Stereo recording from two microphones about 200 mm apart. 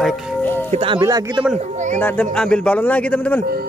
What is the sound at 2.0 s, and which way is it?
A man's voice, 10° left (ahead or behind).